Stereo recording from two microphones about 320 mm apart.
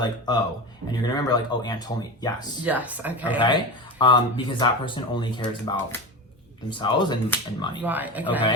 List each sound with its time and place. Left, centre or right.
0.0 s speech: centre
2.6 s speech: centre
3.4 s speech: centre
7.9 s speech: centre